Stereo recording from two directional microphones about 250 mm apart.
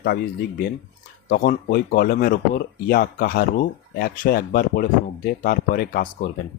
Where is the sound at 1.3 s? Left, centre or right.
Left.